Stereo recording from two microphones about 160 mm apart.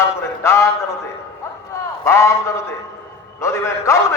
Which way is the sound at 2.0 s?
15° left (ahead or behind).